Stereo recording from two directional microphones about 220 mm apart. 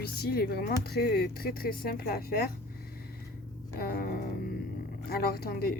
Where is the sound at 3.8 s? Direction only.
40° left (ahead or behind).